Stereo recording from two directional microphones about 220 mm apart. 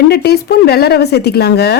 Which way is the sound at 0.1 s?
45° left (ahead or behind).